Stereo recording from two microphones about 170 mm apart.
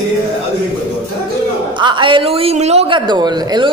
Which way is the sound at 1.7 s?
30° right (ahead or behind).